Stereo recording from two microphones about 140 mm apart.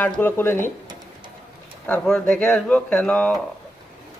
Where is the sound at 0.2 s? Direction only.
15° left (ahead or behind).